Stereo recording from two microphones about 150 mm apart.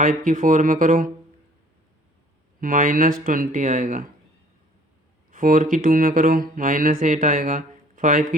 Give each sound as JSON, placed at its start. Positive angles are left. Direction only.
{"t": 0.0, "sound": "speech", "side_deg": -65}
{"t": 2.6, "sound": "speech", "side_deg": -65}
{"t": 5.3, "sound": "speech", "side_deg": -65}